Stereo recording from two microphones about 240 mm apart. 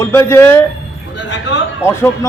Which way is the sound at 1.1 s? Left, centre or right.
Left.